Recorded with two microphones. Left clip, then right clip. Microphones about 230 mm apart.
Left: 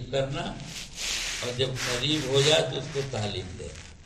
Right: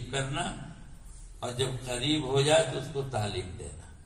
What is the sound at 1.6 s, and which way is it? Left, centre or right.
Speech, right.